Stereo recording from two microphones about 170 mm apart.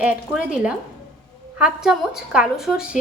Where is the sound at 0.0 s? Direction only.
5° right (ahead or behind).